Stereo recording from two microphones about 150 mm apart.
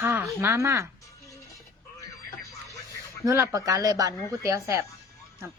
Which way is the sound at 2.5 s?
20° left (ahead or behind).